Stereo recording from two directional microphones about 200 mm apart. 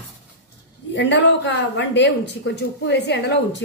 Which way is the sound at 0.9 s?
65° left (ahead or behind).